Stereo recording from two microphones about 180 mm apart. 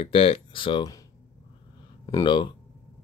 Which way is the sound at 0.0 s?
30° left (ahead or behind).